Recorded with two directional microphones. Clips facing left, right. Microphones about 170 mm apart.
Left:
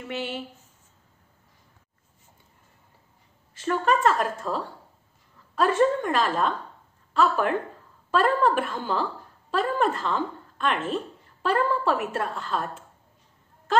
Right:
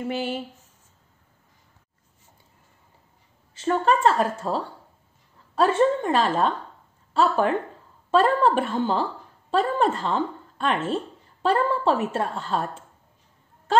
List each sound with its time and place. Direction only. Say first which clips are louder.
0.0 s a woman's voice: right 4 dB; 40° right (ahead or behind)
3.6 s a woman's voice: right 2 dB; 30° right (ahead or behind)